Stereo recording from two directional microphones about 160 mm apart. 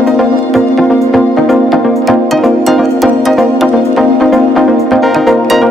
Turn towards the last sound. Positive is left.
turn(degrees=0)  # may be behind; listen again after turning